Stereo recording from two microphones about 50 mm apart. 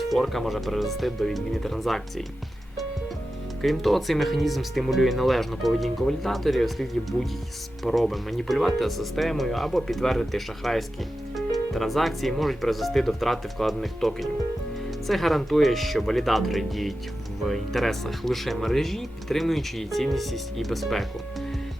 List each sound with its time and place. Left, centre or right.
0.1 s speech: centre
3.6 s speech: centre